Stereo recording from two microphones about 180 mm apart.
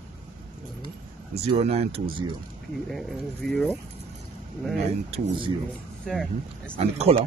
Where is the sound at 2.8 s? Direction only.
Centre (ahead or behind).